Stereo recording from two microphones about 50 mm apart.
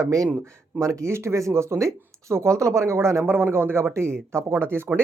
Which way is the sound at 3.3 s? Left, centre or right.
Right.